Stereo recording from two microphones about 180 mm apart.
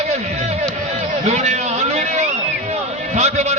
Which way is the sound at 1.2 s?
40° right (ahead or behind).